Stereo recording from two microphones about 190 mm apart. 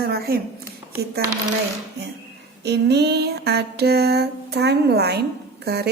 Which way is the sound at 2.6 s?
60° right (ahead or behind).